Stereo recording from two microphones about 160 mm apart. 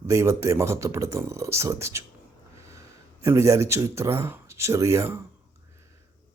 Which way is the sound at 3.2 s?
20° right (ahead or behind).